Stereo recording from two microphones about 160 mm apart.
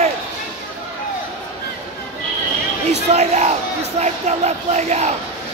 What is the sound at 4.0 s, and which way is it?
Music, 45° right (ahead or behind).